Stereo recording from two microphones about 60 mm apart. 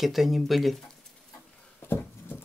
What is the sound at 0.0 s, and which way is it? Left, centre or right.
Speech, centre.